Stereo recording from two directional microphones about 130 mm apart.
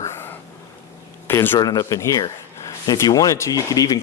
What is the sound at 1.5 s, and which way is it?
A man's voice, 30° left (ahead or behind).